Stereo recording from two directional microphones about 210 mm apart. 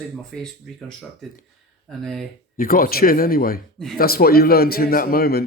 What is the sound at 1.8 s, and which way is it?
Speech, centre (ahead or behind).